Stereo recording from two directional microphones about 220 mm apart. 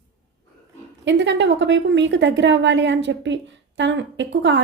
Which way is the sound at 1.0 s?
55° right (ahead or behind).